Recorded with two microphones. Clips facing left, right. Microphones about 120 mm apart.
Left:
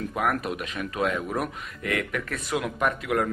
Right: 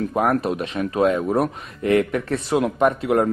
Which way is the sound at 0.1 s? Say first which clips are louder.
Right 6 dB; 35° right (ahead or behind).